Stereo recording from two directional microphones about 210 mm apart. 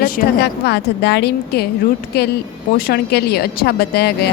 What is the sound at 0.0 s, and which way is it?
Speech, 45° left (ahead or behind).